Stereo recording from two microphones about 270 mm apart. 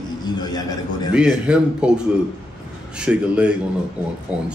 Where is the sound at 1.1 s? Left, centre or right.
Centre.